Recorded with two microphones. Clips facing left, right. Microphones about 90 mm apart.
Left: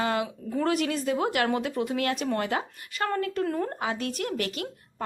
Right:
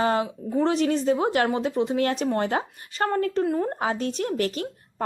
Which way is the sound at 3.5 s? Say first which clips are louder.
Right 4 dB; 15° right (ahead or behind).